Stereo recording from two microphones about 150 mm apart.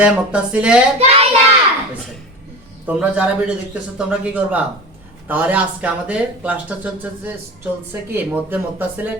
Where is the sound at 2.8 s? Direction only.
10° right (ahead or behind).